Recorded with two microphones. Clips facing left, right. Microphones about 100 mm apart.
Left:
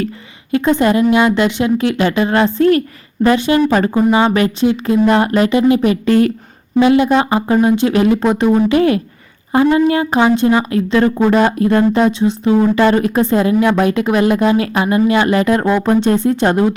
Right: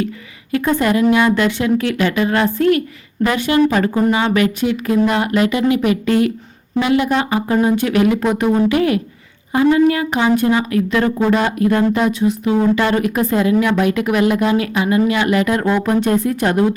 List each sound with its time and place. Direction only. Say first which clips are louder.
0.5 s speech: left 3 dB; 25° left (ahead or behind)
6.7 s speech: left 5 dB; 25° left (ahead or behind)